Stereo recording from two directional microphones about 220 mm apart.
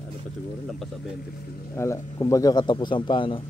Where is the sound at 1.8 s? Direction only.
15° left (ahead or behind).